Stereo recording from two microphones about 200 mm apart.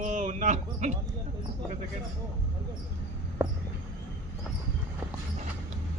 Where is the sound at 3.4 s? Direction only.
10° right (ahead or behind).